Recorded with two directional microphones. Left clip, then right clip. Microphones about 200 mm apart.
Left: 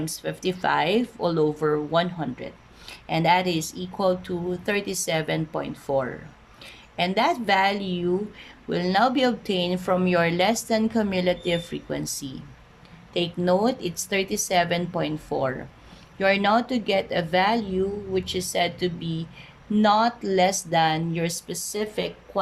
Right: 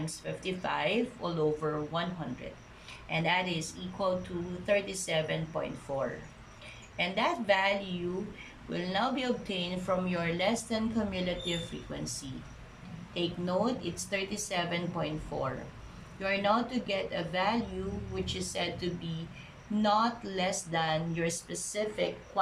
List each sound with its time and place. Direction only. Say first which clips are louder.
0.0 s speech: left 9 dB; 55° left (ahead or behind)
13.1 s speech: left 9 dB; 50° left (ahead or behind)